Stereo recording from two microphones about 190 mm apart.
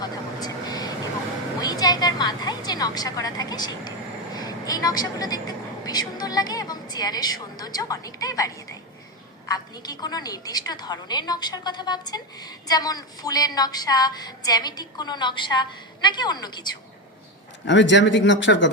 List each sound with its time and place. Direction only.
0.0 s vehicle: 20° left (ahead or behind)
1.6 s a sound: 20° left (ahead or behind)
4.4 s a woman's voice: 20° left (ahead or behind)
17.7 s speech: 70° left (ahead or behind)